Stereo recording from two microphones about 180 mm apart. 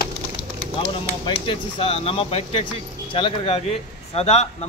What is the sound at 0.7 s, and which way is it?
Speech, 30° left (ahead or behind).